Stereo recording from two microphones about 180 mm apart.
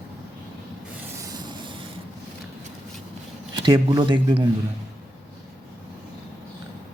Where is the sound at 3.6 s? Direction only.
25° right (ahead or behind).